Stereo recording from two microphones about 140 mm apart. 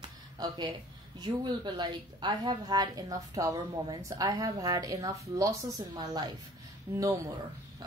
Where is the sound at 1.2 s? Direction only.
30° right (ahead or behind).